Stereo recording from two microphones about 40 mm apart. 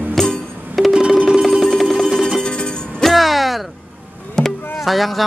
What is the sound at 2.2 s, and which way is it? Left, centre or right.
Music, centre.